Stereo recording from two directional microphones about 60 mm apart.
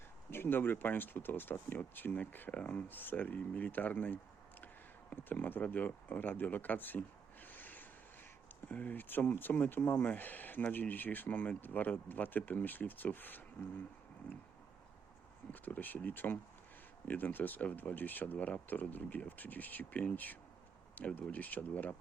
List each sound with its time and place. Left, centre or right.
0.3 s speech: left
7.4 s a sound: left
8.7 s speech: left
15.5 s speech: left